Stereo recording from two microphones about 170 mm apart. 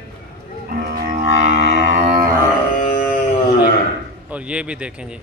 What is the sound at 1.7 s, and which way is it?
Music, 40° right (ahead or behind).